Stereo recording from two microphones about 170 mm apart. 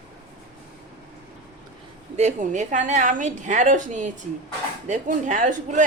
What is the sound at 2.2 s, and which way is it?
Speech, 45° right (ahead or behind).